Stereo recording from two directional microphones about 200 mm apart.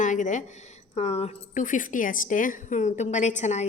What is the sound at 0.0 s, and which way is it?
A woman's voice, 40° left (ahead or behind).